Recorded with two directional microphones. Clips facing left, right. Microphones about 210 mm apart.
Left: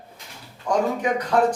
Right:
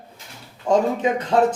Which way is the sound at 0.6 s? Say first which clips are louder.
Right 3 dB; 25° right (ahead or behind).